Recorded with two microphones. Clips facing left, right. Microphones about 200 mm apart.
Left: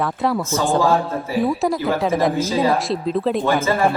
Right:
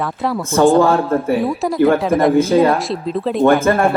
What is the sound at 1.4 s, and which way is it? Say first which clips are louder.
Speech: even; centre (ahead or behind).